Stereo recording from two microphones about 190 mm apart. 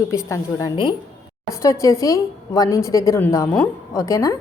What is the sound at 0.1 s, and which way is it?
A woman's voice, 15° left (ahead or behind).